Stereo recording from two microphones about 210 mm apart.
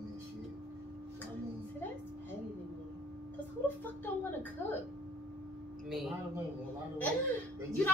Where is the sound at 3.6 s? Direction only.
10° left (ahead or behind).